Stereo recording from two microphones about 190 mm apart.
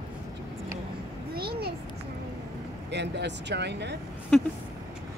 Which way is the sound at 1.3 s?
55° right (ahead or behind).